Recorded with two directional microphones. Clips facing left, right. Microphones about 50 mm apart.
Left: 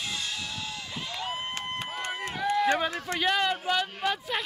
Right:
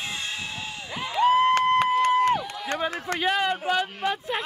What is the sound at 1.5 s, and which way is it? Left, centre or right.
Run, right.